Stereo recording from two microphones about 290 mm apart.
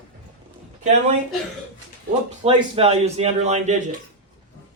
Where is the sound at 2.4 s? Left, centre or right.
Centre.